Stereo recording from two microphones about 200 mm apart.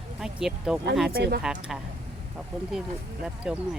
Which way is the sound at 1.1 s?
50° right (ahead or behind).